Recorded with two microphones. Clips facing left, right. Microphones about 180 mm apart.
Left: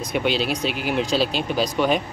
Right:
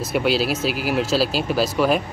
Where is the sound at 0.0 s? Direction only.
5° right (ahead or behind).